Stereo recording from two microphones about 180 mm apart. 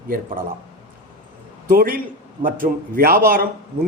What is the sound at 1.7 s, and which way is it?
A man's voice, 55° right (ahead or behind).